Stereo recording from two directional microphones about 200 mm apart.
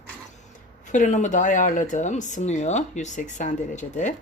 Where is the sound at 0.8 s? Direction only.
40° left (ahead or behind).